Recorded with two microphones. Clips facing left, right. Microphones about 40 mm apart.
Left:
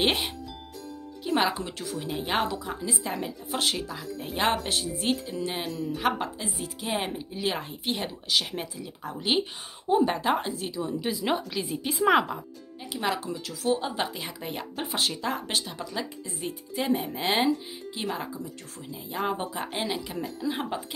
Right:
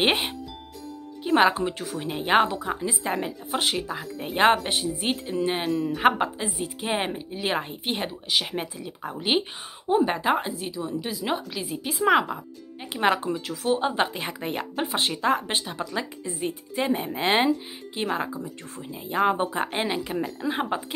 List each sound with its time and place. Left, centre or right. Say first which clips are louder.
0.0 s speech: right 3 dB; right
5.9 s a woman's voice: right 6 dB; right; by 12.4 s centre
12.9 s speech: right 6 dB; right
19.9 s speech: right 4 dB; right